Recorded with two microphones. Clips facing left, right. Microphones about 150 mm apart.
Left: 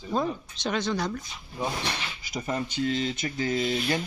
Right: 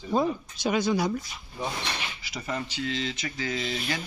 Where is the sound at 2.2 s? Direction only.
45° left (ahead or behind).